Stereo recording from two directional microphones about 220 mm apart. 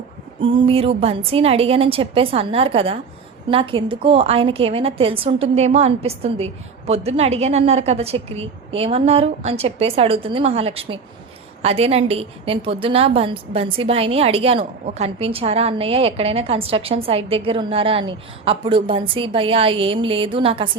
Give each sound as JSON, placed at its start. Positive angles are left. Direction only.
{"t": 0.4, "sound": "a woman's voice", "side_deg": -25}